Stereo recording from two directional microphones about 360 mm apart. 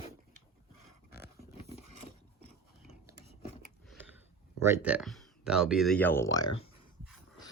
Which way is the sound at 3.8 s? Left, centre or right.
Centre.